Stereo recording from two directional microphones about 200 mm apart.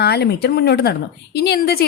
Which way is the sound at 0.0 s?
55° left (ahead or behind).